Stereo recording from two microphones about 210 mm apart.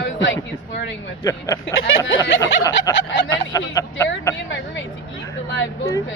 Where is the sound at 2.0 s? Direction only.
65° left (ahead or behind).